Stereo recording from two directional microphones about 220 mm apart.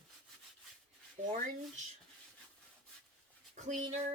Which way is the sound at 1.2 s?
35° right (ahead or behind).